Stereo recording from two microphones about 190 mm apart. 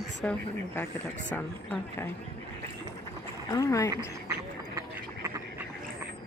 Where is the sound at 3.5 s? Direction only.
15° left (ahead or behind).